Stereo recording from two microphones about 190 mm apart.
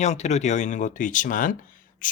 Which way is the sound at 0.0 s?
35° left (ahead or behind).